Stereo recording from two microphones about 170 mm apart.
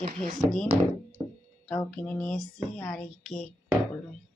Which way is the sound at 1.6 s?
10° left (ahead or behind).